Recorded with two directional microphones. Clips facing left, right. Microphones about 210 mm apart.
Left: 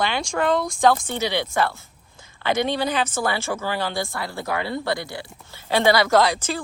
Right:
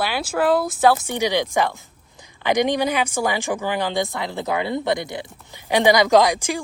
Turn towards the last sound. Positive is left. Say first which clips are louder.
# right 3 dB
turn(degrees=-15)  # may be behind; listen again after turning